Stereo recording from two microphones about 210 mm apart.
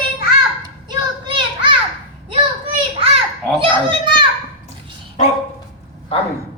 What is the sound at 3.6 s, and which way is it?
Children playing, 25° right (ahead or behind).